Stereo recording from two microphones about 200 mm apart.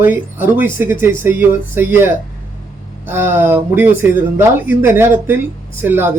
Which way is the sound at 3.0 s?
10° right (ahead or behind).